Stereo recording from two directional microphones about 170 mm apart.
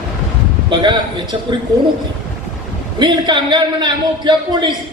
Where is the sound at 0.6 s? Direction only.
25° right (ahead or behind).